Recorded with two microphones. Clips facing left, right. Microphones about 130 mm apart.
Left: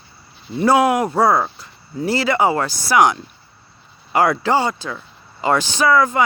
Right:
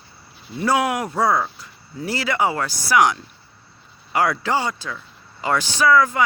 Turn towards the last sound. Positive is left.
turn(degrees=25)  # may be behind; listen again after turning